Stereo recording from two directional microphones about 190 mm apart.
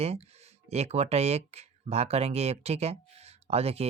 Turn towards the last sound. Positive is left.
turn(degrees=-30)  # may be behind; listen again after turning